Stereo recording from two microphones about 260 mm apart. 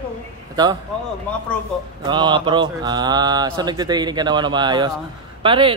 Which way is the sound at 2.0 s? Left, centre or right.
Centre.